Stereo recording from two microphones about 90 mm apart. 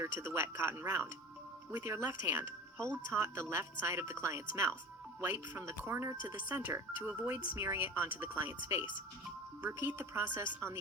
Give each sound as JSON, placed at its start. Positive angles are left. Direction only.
{"t": 0.0, "sound": "speech", "side_deg": -30}